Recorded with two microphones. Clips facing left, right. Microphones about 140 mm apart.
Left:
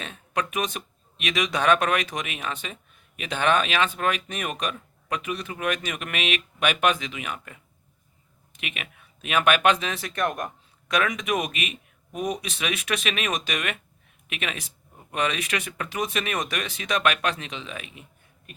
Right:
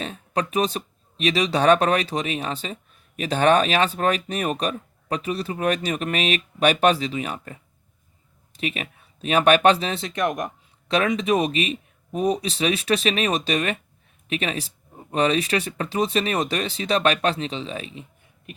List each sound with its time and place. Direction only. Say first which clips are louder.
0.0 s speech: right 3 dB; 35° right (ahead or behind)